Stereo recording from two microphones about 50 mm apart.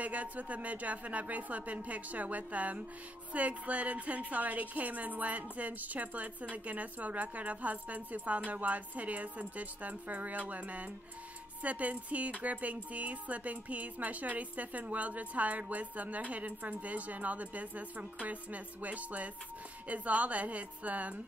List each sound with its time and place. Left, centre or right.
0.0 s a woman's voice: right